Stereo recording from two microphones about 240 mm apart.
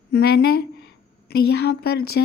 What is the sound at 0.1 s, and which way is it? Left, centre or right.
A woman's voice, left.